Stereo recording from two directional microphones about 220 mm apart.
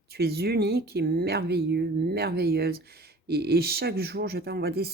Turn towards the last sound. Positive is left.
turn(degrees=-45)  # may be behind; listen again after turning